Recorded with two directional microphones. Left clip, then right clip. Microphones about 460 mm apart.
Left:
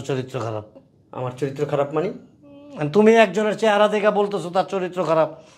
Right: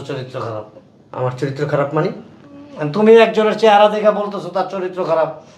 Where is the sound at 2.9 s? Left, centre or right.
Left.